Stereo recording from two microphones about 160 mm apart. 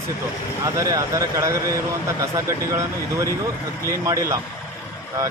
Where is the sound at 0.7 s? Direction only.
20° right (ahead or behind).